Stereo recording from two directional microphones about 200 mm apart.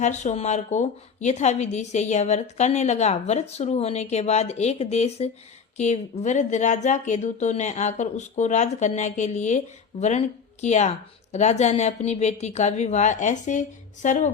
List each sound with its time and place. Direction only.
0.0 s a woman's voice: 35° left (ahead or behind)